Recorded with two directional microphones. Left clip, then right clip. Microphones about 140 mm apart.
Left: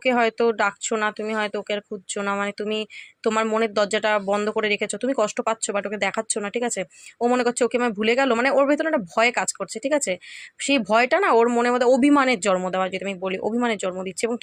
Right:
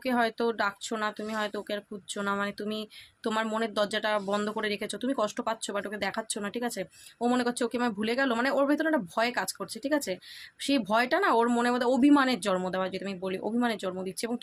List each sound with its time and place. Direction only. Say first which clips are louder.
0.0 s speech: left 8 dB; 45° left (ahead or behind)